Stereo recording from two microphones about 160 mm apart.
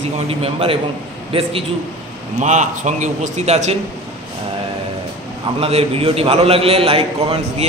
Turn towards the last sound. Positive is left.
turn(degrees=-40)  # may be behind; listen again after turning